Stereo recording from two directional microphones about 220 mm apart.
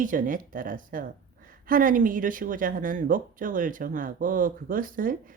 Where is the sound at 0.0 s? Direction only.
35° right (ahead or behind).